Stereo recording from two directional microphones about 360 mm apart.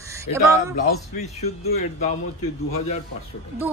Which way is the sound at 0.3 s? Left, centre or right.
Centre.